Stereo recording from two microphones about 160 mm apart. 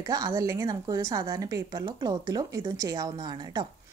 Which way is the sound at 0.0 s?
25° right (ahead or behind).